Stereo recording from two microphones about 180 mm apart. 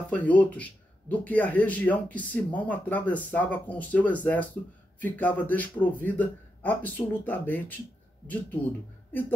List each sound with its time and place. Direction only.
0.1 s speech: 10° left (ahead or behind)
9.1 s speech: 10° left (ahead or behind)